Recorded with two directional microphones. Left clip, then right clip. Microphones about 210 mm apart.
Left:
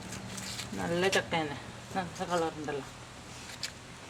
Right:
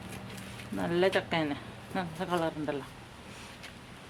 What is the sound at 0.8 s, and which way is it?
A woman's voice, 30° right (ahead or behind).